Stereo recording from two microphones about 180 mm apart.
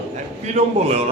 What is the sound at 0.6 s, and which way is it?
Speech, 40° right (ahead or behind).